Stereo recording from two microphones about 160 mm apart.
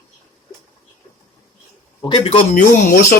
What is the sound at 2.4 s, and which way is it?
Speech, 65° left (ahead or behind).